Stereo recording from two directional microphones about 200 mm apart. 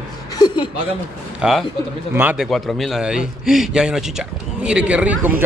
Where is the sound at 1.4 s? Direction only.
5° right (ahead or behind).